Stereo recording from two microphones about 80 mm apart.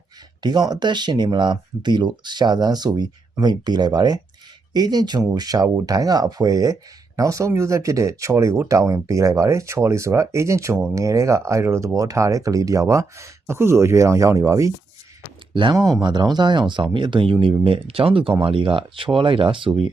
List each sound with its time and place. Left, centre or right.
0.4 s speech: right
16.0 s speech: right